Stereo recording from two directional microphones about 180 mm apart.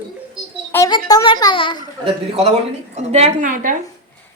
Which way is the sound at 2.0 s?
35° right (ahead or behind).